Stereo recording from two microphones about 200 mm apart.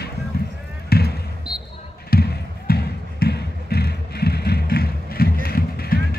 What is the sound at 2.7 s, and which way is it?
Music, 50° left (ahead or behind).